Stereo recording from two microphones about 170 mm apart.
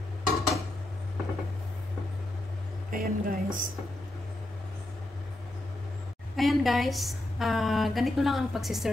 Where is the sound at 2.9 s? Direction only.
55° right (ahead or behind).